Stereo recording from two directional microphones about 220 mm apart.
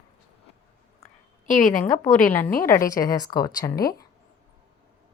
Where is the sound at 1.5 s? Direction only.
35° left (ahead or behind).